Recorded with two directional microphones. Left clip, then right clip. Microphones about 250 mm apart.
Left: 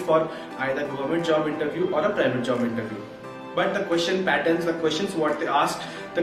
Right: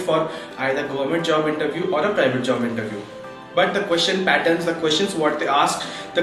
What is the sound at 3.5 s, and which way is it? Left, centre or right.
Speech, centre.